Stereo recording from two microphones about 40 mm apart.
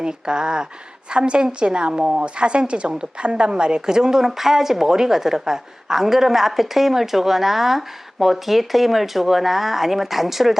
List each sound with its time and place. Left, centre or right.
0.0 s a woman's voice: right